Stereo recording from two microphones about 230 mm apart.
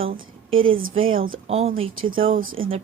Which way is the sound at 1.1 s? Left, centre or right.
Right.